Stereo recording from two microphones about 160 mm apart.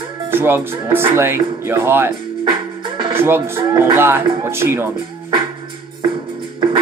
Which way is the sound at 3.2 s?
15° right (ahead or behind).